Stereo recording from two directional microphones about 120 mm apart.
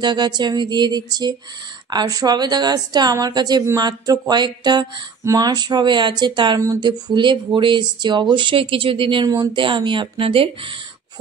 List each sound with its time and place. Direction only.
0.0 s speech: 40° right (ahead or behind)